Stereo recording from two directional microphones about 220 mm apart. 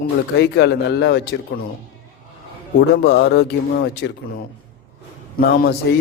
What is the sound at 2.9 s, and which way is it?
A man's voice, 50° left (ahead or behind).